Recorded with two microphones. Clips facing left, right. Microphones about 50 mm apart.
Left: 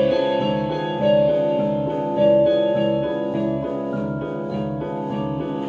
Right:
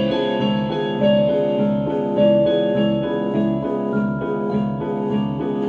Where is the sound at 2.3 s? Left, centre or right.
Right.